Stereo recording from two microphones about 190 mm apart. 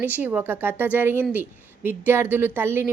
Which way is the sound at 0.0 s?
10° right (ahead or behind).